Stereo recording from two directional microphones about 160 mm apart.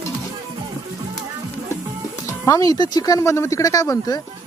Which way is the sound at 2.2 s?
20° left (ahead or behind).